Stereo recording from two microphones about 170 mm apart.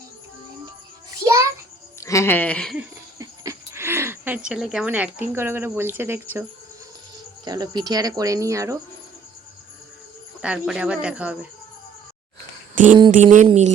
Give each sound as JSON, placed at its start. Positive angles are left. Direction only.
{"t": 1.1, "sound": "a sound", "side_deg": -15}
{"t": 2.0, "sound": "speech", "side_deg": 20}
{"t": 3.2, "sound": "speech", "side_deg": -20}
{"t": 7.4, "sound": "speech", "side_deg": -25}
{"t": 10.4, "sound": "speech", "side_deg": -5}
{"t": 12.7, "sound": "a sound", "side_deg": -50}
{"t": 13.1, "sound": "speech", "side_deg": -50}